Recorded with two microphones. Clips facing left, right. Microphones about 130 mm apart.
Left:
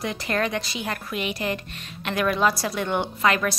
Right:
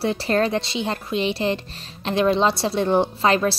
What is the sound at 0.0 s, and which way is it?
Speech, 30° right (ahead or behind).